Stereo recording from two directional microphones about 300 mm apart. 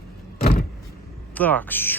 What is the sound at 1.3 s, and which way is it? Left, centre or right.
Speech, centre.